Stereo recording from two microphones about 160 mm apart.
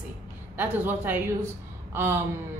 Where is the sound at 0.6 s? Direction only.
10° right (ahead or behind).